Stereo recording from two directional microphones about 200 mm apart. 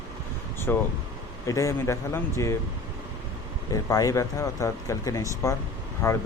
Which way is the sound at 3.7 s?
15° left (ahead or behind).